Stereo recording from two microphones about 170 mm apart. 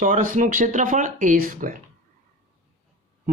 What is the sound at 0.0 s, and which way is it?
Speech, 50° right (ahead or behind).